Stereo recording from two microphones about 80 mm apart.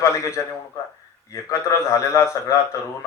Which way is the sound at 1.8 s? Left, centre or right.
Left.